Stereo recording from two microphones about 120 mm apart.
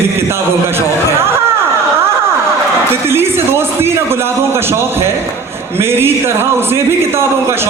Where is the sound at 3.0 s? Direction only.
20° right (ahead or behind).